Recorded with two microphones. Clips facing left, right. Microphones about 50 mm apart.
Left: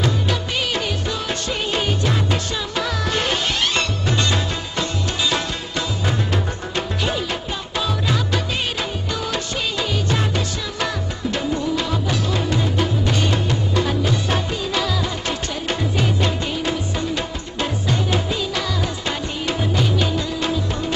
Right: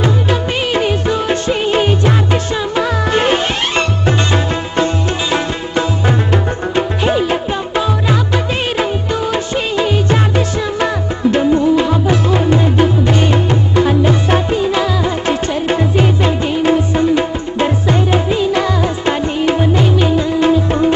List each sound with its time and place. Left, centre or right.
0.0 s music: right